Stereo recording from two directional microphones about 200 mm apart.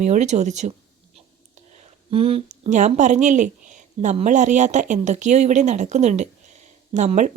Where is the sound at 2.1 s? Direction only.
30° right (ahead or behind).